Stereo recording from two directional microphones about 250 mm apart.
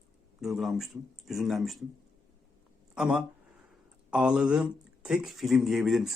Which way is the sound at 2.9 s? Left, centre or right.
Centre.